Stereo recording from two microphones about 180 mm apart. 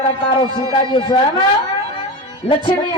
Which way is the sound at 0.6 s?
30° left (ahead or behind).